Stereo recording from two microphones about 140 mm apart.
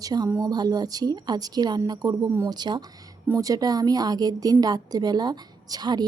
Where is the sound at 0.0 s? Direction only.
25° right (ahead or behind).